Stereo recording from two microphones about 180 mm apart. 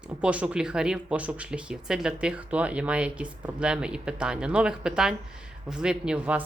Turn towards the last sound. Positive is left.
turn(degrees=-5)  # may be behind; listen again after turning